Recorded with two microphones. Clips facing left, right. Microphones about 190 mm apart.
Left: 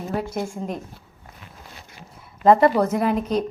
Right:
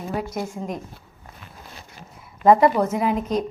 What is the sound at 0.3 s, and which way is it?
Speech, 30° left (ahead or behind).